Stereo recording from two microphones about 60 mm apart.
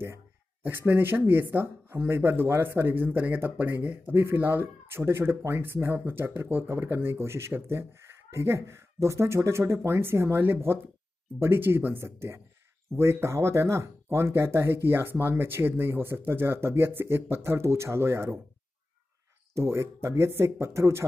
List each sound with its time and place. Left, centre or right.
0.7 s speech: right
4.1 s speech: right
4.4 s speech: right
4.8 s speech: right
19.5 s speech: right